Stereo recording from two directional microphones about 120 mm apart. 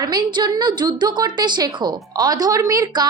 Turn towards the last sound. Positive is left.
turn(degrees=-30)  # may be behind; listen again after turning